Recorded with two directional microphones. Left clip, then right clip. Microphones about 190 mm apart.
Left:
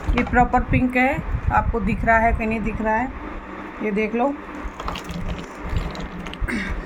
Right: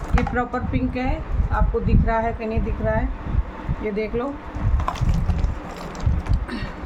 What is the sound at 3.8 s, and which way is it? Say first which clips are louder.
Speech: left 2 dB; 15° left (ahead or behind).